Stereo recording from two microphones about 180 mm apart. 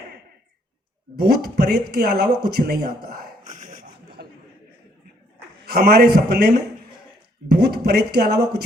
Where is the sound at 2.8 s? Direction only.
55° right (ahead or behind).